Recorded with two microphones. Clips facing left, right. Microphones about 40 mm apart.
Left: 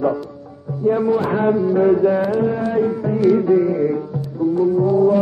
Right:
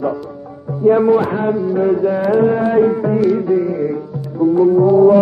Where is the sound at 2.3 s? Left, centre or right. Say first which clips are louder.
Right 6 dB; right.